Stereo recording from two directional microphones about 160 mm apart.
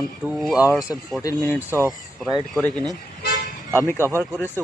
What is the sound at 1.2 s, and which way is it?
Speech, 20° left (ahead or behind).